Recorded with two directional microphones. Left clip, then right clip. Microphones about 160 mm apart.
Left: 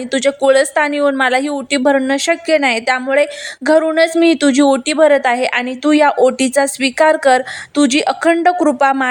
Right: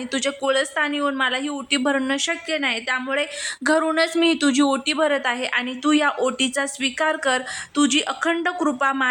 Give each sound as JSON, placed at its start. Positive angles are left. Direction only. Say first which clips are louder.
{"t": 0.1, "sound": "speech", "louder": "left 10 dB", "side_deg": 25}
{"t": 3.1, "sound": "speech", "louder": "left 10 dB", "side_deg": 30}